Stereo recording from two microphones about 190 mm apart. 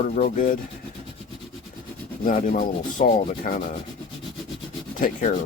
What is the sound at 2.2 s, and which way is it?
Speech, 45° left (ahead or behind).